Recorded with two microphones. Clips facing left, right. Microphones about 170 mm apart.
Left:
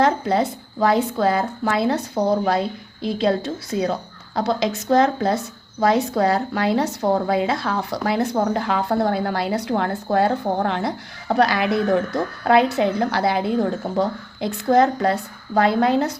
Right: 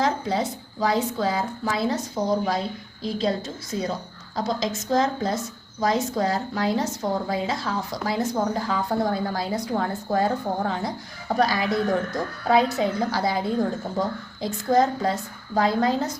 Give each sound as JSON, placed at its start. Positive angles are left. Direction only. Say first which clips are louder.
{"t": 0.0, "sound": "a woman's voice", "louder": "left 5 dB", "side_deg": 60}